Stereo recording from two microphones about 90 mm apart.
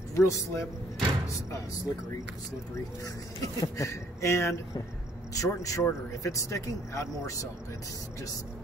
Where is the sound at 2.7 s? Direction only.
40° left (ahead or behind).